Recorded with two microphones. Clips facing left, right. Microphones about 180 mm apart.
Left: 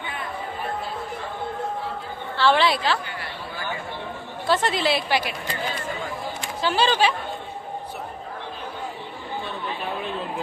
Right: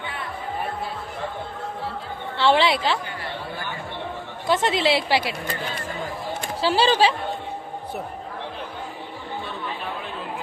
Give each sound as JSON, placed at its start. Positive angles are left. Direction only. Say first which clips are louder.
{"t": 2.4, "sound": "a woman's voice", "louder": "right 1 dB", "side_deg": -25}
{"t": 4.4, "sound": "a woman's voice", "louder": "right 1 dB", "side_deg": -20}
{"t": 6.6, "sound": "speech", "louder": "right 2 dB", "side_deg": -30}